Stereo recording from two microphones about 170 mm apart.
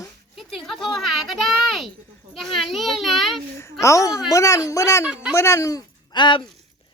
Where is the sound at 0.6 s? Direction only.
Centre (ahead or behind).